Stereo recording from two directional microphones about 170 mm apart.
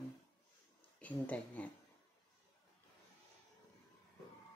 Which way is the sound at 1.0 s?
10° left (ahead or behind).